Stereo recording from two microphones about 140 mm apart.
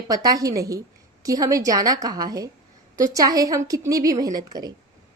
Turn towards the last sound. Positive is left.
turn(degrees=-30)  # may be behind; listen again after turning